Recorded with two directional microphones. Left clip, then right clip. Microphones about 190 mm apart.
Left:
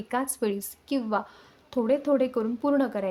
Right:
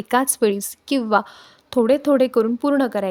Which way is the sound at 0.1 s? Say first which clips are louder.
Right 10 dB; 45° right (ahead or behind).